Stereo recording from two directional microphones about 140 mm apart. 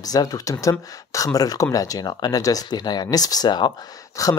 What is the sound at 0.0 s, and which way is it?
Speech, 25° left (ahead or behind).